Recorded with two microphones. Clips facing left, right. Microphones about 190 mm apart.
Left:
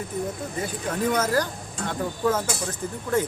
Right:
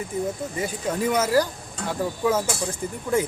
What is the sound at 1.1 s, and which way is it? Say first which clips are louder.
Speech: right 5 dB; 10° right (ahead or behind).